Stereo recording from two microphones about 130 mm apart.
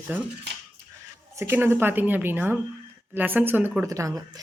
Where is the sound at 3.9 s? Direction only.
25° right (ahead or behind).